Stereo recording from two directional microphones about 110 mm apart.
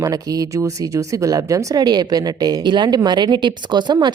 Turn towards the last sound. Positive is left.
turn(degrees=-40)  # may be behind; listen again after turning